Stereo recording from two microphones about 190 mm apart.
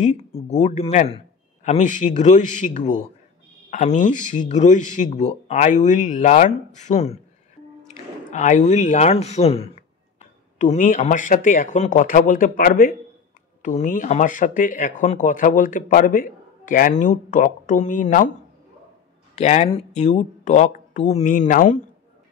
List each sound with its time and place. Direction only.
0.0 s speech: 35° left (ahead or behind)
8.3 s speech: 40° left (ahead or behind)
10.6 s speech: 40° left (ahead or behind)
19.3 s speech: 35° left (ahead or behind)